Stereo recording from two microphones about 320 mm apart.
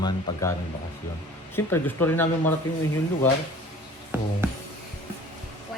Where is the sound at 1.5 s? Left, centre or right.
Centre.